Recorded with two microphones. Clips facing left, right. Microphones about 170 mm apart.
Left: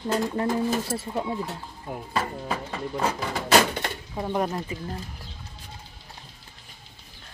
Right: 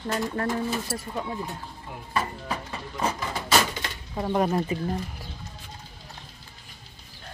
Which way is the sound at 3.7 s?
55° left (ahead or behind).